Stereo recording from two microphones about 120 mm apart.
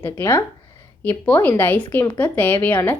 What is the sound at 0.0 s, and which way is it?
A woman's voice, 20° left (ahead or behind).